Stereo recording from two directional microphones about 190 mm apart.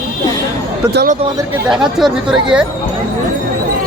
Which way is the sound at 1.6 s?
5° right (ahead or behind).